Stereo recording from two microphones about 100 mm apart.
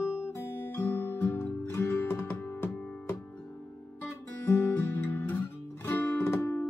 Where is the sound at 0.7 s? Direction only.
20° left (ahead or behind).